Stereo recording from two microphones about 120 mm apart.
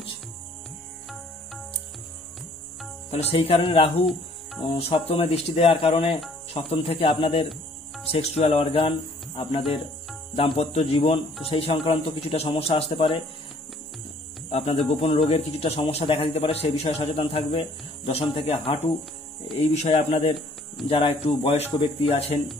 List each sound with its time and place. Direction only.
3.1 s speech: 55° left (ahead or behind)
4.0 s cricket: centre (ahead or behind)
4.6 s speech: 55° left (ahead or behind)
14.5 s speech: 50° left (ahead or behind)
19.6 s speech: 65° left (ahead or behind)
19.9 s speech: 55° left (ahead or behind)